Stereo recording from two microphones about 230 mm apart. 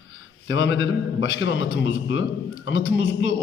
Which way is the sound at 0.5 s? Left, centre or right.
Left.